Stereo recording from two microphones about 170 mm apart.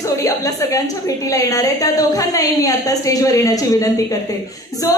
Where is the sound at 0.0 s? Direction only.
20° left (ahead or behind).